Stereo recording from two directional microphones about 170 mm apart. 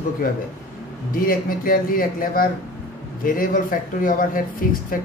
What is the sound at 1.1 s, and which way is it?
A woman's voice, 55° left (ahead or behind).